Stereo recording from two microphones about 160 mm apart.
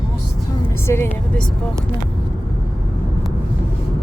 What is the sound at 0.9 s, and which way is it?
Speech, 20° left (ahead or behind).